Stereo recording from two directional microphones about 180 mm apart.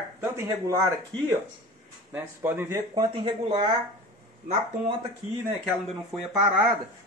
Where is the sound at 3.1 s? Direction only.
30° right (ahead or behind).